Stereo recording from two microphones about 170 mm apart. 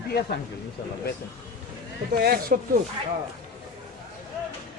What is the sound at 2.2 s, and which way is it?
Speech, 65° right (ahead or behind).